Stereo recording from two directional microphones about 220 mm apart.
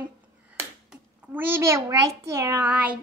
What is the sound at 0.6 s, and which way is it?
A child's voice, 10° right (ahead or behind).